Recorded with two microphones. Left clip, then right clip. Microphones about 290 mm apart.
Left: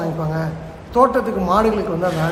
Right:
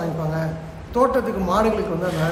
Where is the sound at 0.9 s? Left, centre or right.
Centre.